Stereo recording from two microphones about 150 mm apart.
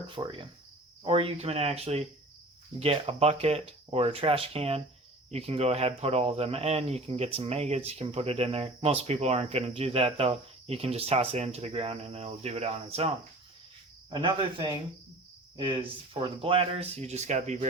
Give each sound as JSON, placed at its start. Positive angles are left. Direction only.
{"t": 0.1, "sound": "speech", "side_deg": -35}
{"t": 14.1, "sound": "speech", "side_deg": -30}